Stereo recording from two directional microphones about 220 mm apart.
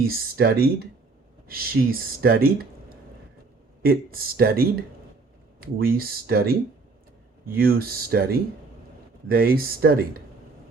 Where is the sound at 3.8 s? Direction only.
45° right (ahead or behind).